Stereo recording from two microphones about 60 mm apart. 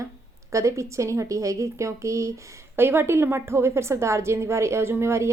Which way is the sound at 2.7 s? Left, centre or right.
Right.